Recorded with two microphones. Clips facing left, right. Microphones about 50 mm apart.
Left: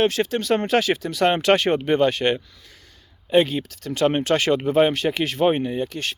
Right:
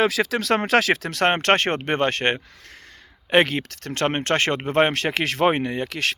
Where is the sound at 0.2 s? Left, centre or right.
Right.